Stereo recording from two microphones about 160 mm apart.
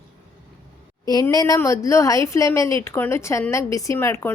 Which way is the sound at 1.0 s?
25° left (ahead or behind).